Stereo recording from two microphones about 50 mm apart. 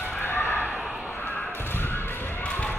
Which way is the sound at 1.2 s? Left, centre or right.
Left.